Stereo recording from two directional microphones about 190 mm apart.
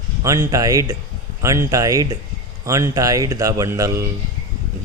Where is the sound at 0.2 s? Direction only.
15° right (ahead or behind).